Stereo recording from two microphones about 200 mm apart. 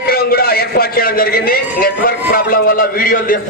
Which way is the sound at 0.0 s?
50° left (ahead or behind).